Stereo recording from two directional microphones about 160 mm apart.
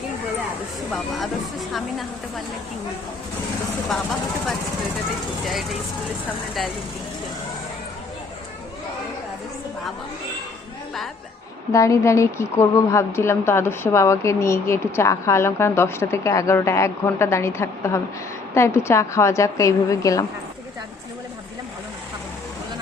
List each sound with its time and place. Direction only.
0.9 s speech: centre (ahead or behind)
11.7 s a woman's voice: 20° left (ahead or behind)